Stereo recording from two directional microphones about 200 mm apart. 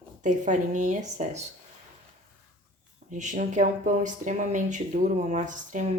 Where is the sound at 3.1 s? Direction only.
40° right (ahead or behind).